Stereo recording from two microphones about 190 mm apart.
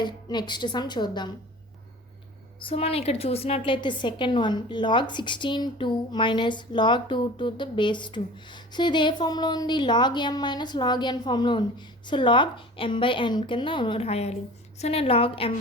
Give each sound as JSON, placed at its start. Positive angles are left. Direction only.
{"t": 0.0, "sound": "a woman's voice", "side_deg": 25}
{"t": 2.6, "sound": "a woman's voice", "side_deg": 30}